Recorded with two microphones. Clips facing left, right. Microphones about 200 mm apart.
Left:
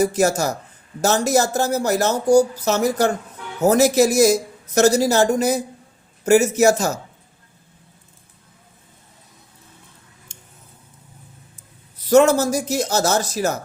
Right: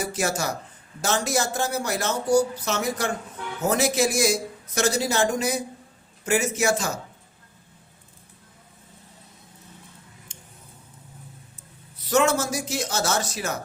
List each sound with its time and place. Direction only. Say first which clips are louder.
0.0 s speech: left 8 dB; 40° left (ahead or behind)
12.1 s speech: left 8 dB; 40° left (ahead or behind)